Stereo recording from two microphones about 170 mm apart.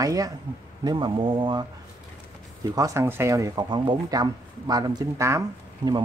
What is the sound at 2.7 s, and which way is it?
Speech, 20° right (ahead or behind).